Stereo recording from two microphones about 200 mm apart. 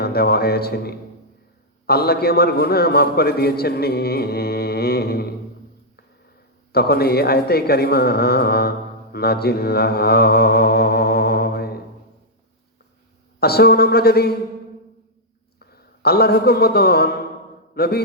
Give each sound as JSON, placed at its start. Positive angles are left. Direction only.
{"t": 0.0, "sound": "a man's voice", "side_deg": 50}
{"t": 6.7, "sound": "a man's voice", "side_deg": 50}
{"t": 9.1, "sound": "mantra", "side_deg": 50}
{"t": 13.4, "sound": "a man's voice", "side_deg": 50}
{"t": 15.5, "sound": "a man's voice", "side_deg": 50}